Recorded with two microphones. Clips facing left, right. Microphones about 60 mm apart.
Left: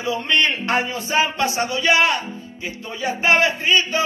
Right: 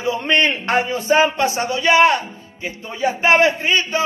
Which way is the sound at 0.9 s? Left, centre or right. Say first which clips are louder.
Right 5 dB; right.